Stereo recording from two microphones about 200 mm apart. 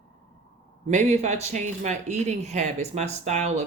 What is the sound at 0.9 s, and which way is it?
Speech, 35° right (ahead or behind).